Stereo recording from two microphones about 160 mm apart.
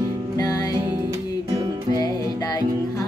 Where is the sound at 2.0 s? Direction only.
25° left (ahead or behind).